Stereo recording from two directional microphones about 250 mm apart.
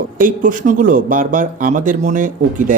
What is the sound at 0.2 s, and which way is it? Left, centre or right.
Speech, right.